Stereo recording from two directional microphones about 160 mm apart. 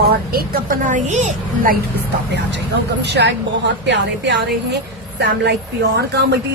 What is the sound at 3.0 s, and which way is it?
A woman's voice, 90° right.